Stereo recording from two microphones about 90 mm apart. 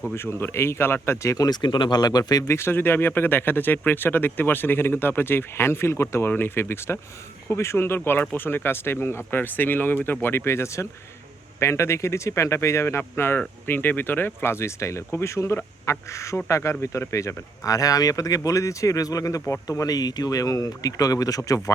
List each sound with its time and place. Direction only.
0.1 s speech: 30° left (ahead or behind); by 2.5 s 45° left (ahead or behind)
2.5 s speech: 30° left (ahead or behind)